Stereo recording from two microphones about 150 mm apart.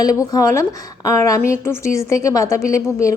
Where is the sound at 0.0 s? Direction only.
25° left (ahead or behind).